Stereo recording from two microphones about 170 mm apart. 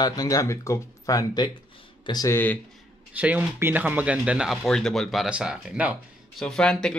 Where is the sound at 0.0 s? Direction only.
20° left (ahead or behind).